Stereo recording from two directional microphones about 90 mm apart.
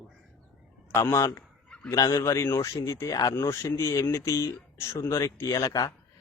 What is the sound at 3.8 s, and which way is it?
Speech, 35° left (ahead or behind).